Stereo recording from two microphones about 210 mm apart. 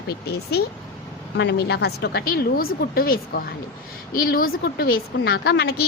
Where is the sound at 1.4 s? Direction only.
55° left (ahead or behind).